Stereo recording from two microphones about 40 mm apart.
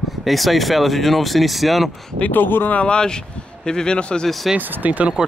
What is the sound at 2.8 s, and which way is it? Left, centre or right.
A man's voice, left.